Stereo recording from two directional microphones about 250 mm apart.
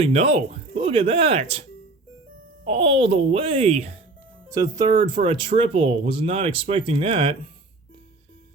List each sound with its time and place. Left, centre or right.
0.0 s speech: right
2.6 s speech: right
4.4 s speech: centre